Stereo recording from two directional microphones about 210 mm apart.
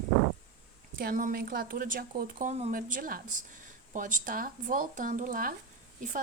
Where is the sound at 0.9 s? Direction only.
40° right (ahead or behind).